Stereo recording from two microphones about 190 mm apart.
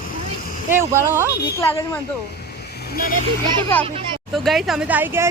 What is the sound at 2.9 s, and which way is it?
Speech, 50° left (ahead or behind).